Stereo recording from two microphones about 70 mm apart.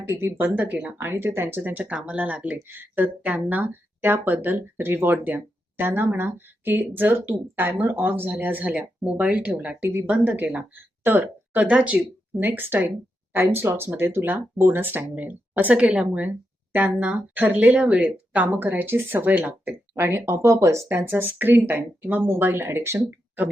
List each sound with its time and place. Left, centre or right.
0.1 s a woman's voice: right